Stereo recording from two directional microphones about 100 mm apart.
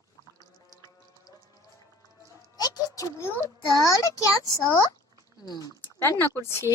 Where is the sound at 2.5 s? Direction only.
40° left (ahead or behind).